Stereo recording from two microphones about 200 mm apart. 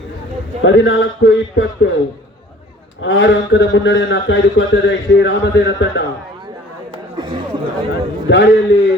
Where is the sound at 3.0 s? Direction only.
70° left (ahead or behind).